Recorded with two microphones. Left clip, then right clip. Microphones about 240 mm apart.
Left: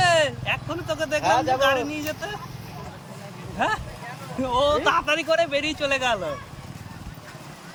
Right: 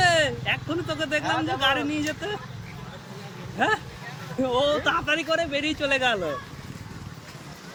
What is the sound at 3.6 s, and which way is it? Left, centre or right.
Speech, centre.